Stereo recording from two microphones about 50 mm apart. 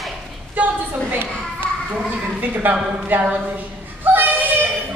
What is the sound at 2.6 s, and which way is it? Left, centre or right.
Speech, right.